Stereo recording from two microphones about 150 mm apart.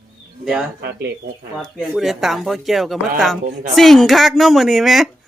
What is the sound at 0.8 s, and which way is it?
Speech, 90° right.